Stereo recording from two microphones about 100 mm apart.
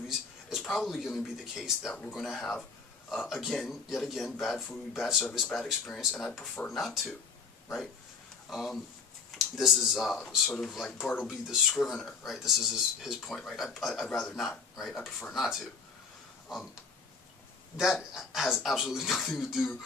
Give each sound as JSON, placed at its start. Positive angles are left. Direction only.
{"t": 0.1, "sound": "speech", "side_deg": 0}
{"t": 8.4, "sound": "speech", "side_deg": 0}
{"t": 17.7, "sound": "speech", "side_deg": -5}